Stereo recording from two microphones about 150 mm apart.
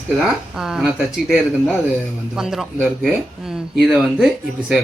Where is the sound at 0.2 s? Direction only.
5° right (ahead or behind).